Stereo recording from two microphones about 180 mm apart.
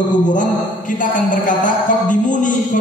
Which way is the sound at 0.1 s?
45° left (ahead or behind).